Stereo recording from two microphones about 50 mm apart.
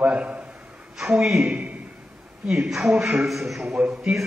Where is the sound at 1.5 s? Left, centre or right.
Right.